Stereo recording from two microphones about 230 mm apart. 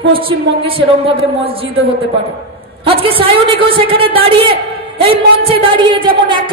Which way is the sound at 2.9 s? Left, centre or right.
Right.